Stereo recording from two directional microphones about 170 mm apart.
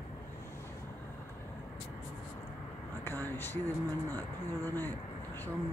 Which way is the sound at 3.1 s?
15° left (ahead or behind).